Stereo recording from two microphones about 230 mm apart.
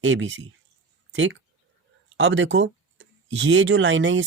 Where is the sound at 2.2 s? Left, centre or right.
Right.